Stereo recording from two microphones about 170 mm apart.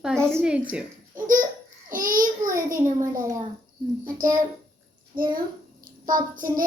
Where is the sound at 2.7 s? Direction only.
50° right (ahead or behind).